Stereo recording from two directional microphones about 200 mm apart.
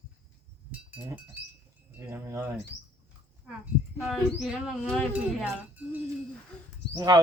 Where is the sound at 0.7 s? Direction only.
10° right (ahead or behind).